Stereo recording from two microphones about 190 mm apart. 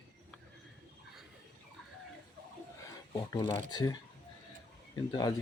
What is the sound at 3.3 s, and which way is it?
Speech, 20° left (ahead or behind).